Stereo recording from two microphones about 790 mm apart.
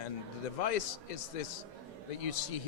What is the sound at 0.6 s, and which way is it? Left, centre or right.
A man's voice, left.